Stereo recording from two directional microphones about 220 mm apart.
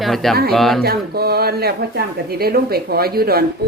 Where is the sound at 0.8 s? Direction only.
45° right (ahead or behind).